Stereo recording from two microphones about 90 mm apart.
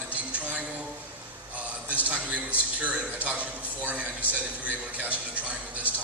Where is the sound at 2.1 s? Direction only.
15° right (ahead or behind).